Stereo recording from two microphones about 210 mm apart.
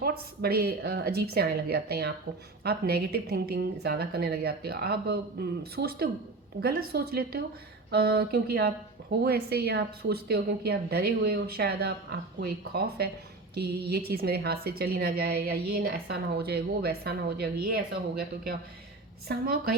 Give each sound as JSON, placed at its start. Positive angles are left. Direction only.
{"t": 0.0, "sound": "a woman's voice", "side_deg": -45}
{"t": 19.3, "sound": "a woman's voice", "side_deg": -50}